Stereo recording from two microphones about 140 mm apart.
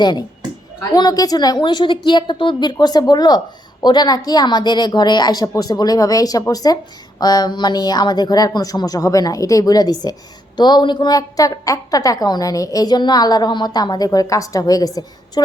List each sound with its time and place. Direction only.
0.0 s a woman's voice: 30° left (ahead or behind)